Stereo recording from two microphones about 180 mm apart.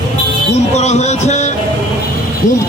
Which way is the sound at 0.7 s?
40° left (ahead or behind).